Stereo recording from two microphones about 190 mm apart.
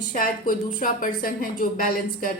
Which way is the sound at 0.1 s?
45° left (ahead or behind).